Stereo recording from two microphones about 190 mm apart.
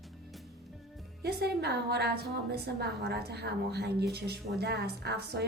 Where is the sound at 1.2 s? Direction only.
55° right (ahead or behind).